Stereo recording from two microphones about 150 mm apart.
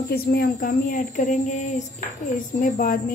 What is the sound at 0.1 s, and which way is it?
Speech, 85° left.